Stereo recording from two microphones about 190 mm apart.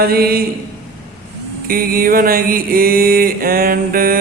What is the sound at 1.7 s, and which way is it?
A man's voice, 50° right (ahead or behind).